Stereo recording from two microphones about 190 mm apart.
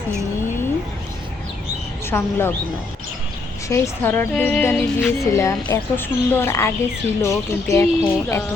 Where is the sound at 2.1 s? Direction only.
10° left (ahead or behind).